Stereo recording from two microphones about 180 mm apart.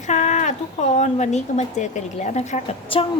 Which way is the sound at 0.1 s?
40° left (ahead or behind).